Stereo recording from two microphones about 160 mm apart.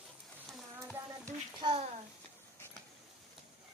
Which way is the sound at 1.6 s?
30° right (ahead or behind).